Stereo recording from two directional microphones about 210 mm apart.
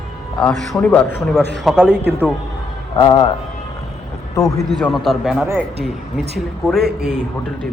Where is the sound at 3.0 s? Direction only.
20° left (ahead or behind).